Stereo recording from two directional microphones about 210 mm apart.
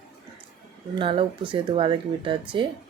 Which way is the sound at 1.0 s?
25° right (ahead or behind).